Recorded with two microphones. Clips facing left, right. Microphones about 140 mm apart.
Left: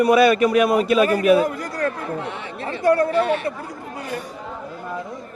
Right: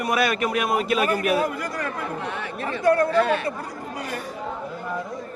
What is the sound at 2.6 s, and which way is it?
Speech, 25° left (ahead or behind).